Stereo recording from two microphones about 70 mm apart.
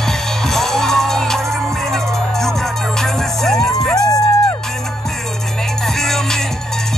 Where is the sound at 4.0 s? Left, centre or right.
Left.